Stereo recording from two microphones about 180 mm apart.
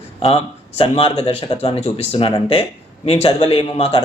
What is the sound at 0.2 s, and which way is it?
Speech, 30° left (ahead or behind).